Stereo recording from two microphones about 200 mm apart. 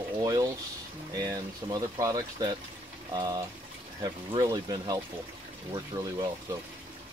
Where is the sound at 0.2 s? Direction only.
15° right (ahead or behind).